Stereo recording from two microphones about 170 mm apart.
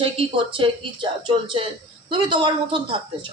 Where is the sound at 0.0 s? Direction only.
30° right (ahead or behind).